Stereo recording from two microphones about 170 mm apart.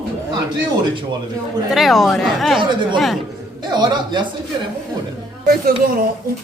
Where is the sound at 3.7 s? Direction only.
25° right (ahead or behind).